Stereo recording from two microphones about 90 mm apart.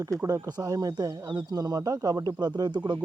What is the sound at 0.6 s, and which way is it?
Speech, 40° right (ahead or behind).